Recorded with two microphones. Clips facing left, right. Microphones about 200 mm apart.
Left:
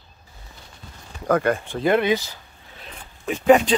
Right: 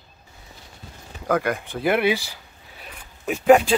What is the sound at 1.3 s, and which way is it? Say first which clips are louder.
Speech: left 3 dB; 15° right (ahead or behind).